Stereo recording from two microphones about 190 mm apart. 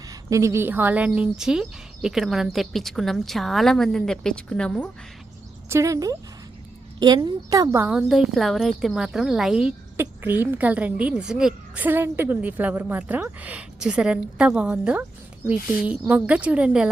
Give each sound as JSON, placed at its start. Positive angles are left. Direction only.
{"t": 0.1, "sound": "speech", "side_deg": -15}
{"t": 5.6, "sound": "a woman's voice", "side_deg": -15}